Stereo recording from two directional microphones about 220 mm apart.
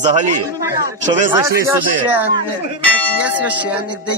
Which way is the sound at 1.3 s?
15° right (ahead or behind).